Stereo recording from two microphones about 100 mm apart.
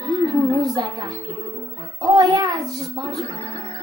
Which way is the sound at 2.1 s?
45° right (ahead or behind).